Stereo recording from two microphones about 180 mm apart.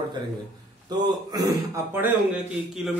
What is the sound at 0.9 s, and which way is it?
A man's voice, 20° right (ahead or behind).